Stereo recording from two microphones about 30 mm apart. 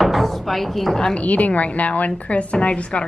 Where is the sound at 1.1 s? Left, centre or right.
Left.